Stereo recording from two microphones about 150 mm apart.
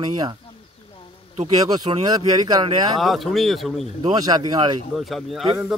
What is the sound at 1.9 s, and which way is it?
Speech, 35° right (ahead or behind).